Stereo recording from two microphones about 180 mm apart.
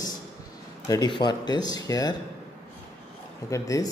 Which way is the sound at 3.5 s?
20° left (ahead or behind).